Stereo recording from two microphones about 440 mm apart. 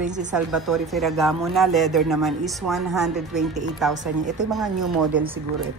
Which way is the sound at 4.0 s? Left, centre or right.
Centre.